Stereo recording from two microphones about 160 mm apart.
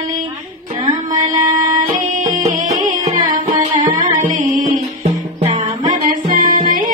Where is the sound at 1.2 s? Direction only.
45° right (ahead or behind).